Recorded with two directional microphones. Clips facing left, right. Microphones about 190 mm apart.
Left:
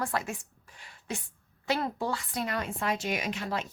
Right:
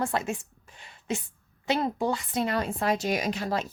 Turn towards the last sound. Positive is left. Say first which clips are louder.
# right 4 dB
turn(degrees=-35)  # may be behind; listen again after turning